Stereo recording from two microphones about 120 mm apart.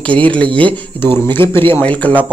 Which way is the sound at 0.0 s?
10° left (ahead or behind).